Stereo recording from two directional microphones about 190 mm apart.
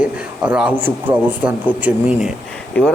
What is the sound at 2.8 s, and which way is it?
Speech, 5° left (ahead or behind).